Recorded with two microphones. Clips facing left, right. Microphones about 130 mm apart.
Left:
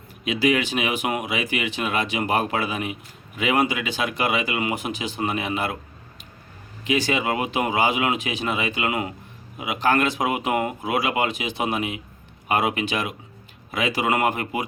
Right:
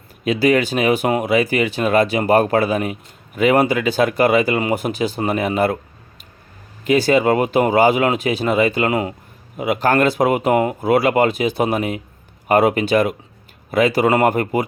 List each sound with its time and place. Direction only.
0.3 s speech: 40° right (ahead or behind)
6.8 s speech: 40° right (ahead or behind)